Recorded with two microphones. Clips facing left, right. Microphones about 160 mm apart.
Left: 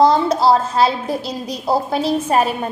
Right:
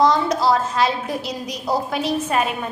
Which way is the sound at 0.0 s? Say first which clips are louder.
Left 4 dB; 30° left (ahead or behind).